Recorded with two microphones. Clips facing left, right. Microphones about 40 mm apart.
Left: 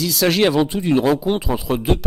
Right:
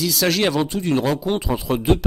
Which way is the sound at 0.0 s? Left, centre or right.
Centre.